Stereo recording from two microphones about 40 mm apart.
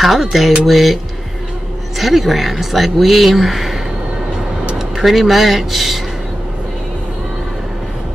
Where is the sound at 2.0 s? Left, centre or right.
Centre.